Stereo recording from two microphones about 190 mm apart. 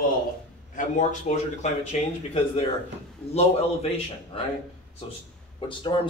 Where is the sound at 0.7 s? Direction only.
40° left (ahead or behind).